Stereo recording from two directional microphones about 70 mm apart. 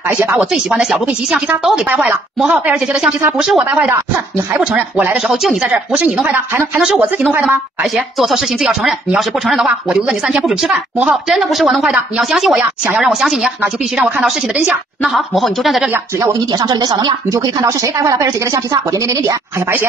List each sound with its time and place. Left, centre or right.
0.4 s speech: centre
3.3 s speech: centre
5.1 s speech: centre
5.7 s speech: centre
6.2 s speech: right
6.8 s speech: centre
7.9 s speech: centre
9.7 s speech: centre
15.0 s speech: centre
16.5 s a woman's voice: right